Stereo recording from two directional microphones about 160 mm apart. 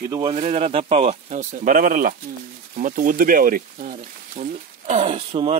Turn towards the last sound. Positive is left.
turn(degrees=-40)  # may be behind; listen again after turning